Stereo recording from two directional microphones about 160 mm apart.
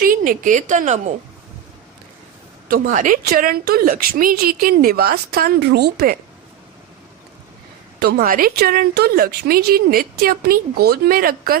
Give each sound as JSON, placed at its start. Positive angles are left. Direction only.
{"t": 0.0, "sound": "a woman's voice", "side_deg": -60}
{"t": 2.6, "sound": "a woman's voice", "side_deg": -60}
{"t": 7.9, "sound": "a woman's voice", "side_deg": -75}